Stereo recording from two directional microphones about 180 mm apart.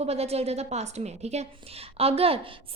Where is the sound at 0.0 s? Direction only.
35° right (ahead or behind).